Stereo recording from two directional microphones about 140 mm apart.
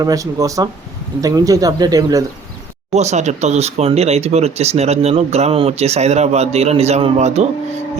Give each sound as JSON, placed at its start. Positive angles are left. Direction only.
{"t": 0.0, "sound": "speech", "side_deg": -25}
{"t": 2.9, "sound": "speech", "side_deg": -55}